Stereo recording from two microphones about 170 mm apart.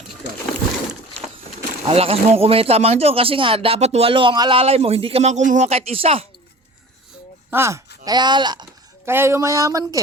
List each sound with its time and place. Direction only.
1.9 s speech: 35° right (ahead or behind)
7.5 s speech: 15° right (ahead or behind)
9.0 s speech: 15° right (ahead or behind)